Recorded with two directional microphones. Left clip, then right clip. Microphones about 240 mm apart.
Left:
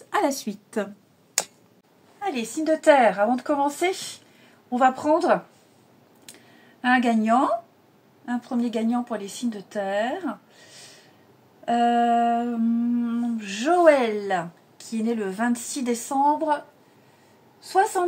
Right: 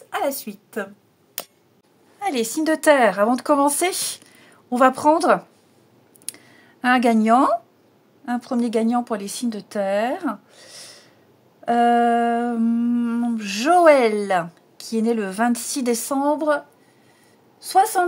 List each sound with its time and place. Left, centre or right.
0.1 s a woman's voice: centre
2.1 s humming: right
6.8 s humming: right
11.6 s humming: right